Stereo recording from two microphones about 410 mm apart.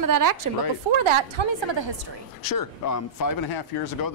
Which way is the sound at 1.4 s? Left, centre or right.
Right.